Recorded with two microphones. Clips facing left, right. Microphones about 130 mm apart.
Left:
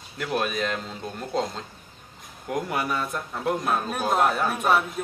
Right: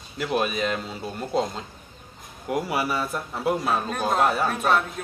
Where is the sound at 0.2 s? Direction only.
5° right (ahead or behind).